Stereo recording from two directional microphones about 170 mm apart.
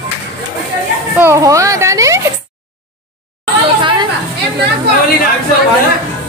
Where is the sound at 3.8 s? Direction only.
30° right (ahead or behind).